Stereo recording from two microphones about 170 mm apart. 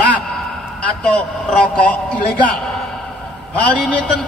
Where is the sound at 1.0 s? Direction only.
5° left (ahead or behind).